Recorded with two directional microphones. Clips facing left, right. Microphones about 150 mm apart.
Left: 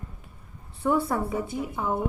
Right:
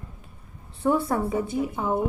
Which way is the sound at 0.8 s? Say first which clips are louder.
Right 2 dB; 25° right (ahead or behind).